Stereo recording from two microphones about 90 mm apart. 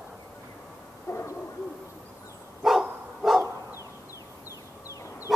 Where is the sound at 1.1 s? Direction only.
35° left (ahead or behind).